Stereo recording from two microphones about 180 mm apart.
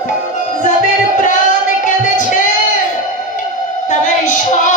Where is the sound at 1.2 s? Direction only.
45° left (ahead or behind).